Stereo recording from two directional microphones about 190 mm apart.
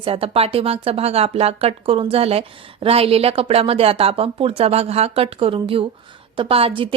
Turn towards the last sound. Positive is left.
turn(degrees=-30)  # may be behind; listen again after turning